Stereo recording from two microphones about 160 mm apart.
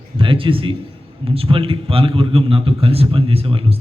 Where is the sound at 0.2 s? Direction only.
30° right (ahead or behind).